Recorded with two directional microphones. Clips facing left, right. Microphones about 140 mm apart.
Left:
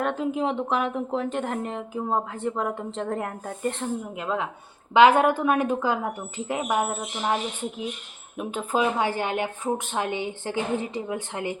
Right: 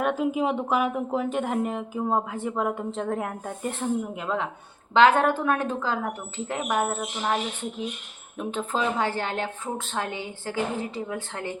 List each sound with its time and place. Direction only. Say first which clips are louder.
0.0 s a woman's voice: right 1 dB; 5° right (ahead or behind); by 7.3 s 10° left (ahead or behind)
8.4 s speech: left 2 dB; 10° left (ahead or behind)